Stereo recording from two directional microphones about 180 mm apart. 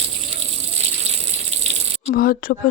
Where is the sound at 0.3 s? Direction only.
35° right (ahead or behind).